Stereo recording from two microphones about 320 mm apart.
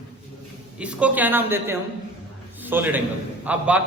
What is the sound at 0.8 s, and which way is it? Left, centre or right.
A man's voice, centre.